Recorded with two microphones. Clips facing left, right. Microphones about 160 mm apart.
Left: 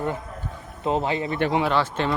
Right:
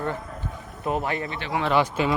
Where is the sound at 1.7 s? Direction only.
10° right (ahead or behind).